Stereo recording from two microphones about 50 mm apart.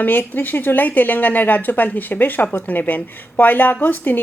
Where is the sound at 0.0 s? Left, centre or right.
Left.